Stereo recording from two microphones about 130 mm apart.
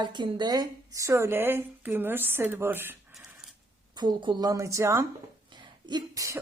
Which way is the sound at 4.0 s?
35° right (ahead or behind).